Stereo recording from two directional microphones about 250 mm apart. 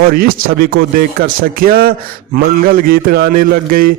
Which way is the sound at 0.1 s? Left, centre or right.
Right.